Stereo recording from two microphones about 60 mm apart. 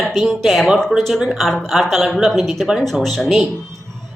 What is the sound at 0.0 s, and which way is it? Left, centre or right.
A woman's voice, centre.